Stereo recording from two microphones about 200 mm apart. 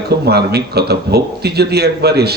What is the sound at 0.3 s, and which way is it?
A man's voice, 55° right (ahead or behind).